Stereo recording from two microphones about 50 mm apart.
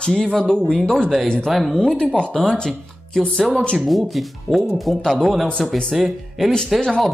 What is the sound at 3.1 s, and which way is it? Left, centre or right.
Speech, centre.